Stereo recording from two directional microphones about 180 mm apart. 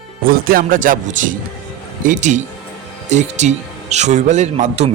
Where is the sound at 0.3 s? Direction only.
50° right (ahead or behind).